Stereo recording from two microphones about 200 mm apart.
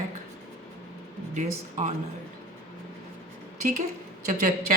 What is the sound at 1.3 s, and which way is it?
Speech, 35° right (ahead or behind).